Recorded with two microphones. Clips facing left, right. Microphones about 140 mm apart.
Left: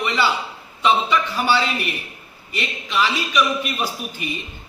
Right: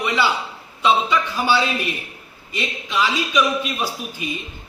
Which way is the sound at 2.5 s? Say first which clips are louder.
Even; 15° right (ahead or behind).